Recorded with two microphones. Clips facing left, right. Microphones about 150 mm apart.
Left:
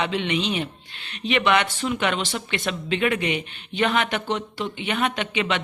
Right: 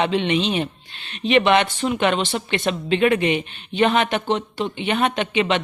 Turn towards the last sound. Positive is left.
turn(degrees=-25)  # may be behind; listen again after turning